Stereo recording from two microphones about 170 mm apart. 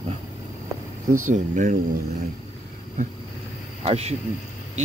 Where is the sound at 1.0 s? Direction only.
50° right (ahead or behind).